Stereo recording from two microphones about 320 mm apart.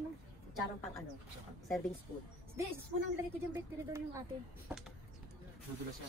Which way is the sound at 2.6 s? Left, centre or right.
Centre.